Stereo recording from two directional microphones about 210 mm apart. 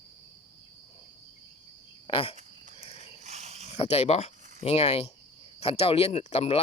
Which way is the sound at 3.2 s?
35° right (ahead or behind).